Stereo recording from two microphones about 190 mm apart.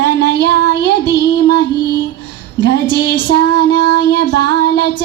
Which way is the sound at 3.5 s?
55° right (ahead or behind).